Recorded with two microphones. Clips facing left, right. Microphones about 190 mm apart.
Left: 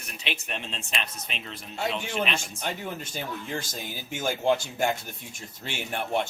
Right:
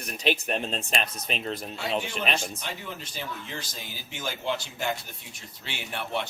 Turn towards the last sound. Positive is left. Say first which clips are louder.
# left 4 dB
turn(degrees=50)  # may be behind; listen again after turning